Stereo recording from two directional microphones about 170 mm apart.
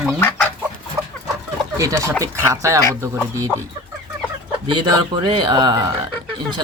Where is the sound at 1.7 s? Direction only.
20° right (ahead or behind).